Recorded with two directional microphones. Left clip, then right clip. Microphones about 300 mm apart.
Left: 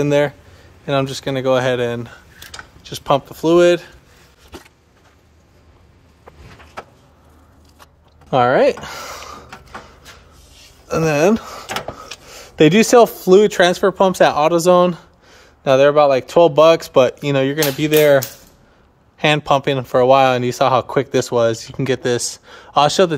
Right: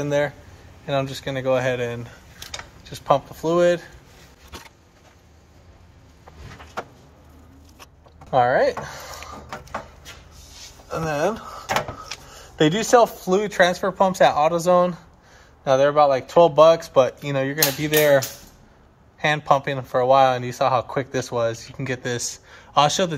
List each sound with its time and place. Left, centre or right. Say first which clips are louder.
0.8 s speech: left 5 dB; left
8.3 s a sound: left 5 dB; left
10.9 s speech: left 8 dB; left; by 23.1 s centre